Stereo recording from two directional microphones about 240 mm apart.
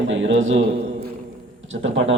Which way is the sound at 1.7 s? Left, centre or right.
Right.